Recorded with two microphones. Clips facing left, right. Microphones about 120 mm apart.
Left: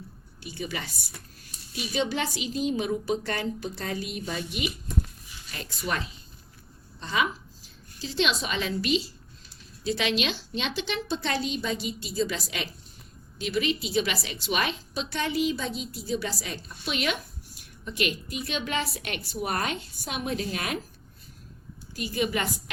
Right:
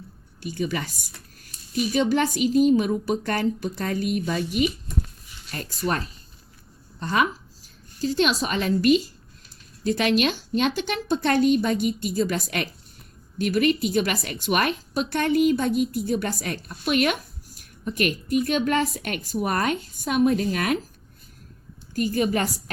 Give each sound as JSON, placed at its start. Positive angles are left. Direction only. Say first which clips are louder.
{"t": 0.4, "sound": "a woman's voice", "louder": "right 7 dB", "side_deg": -45}
{"t": 21.9, "sound": "a woman's voice", "louder": "right 5 dB", "side_deg": -45}